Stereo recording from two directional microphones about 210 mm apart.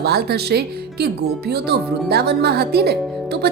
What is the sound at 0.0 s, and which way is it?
Speech, 50° right (ahead or behind).